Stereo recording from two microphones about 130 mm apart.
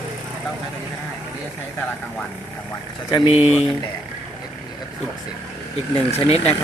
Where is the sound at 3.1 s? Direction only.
35° left (ahead or behind).